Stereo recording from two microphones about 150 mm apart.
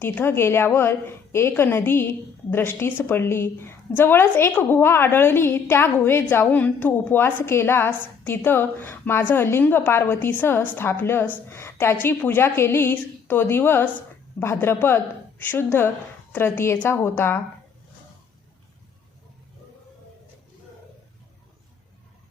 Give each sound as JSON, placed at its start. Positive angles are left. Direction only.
{"t": 0.0, "sound": "a woman's voice", "side_deg": 15}